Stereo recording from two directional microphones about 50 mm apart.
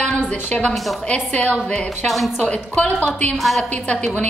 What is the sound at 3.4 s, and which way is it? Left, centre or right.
Speech, centre.